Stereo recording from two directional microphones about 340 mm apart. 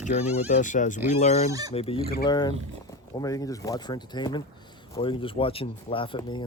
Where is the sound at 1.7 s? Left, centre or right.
Centre.